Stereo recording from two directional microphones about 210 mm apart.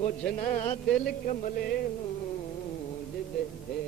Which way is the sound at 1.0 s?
45° left (ahead or behind).